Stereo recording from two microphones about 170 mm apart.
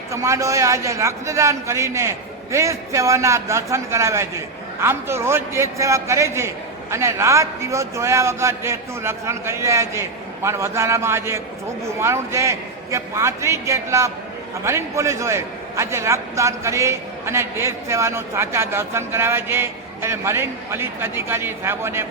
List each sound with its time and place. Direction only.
0.1 s a man's voice: 20° right (ahead or behind)